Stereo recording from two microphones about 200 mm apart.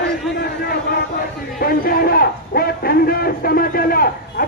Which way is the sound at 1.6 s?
50° left (ahead or behind).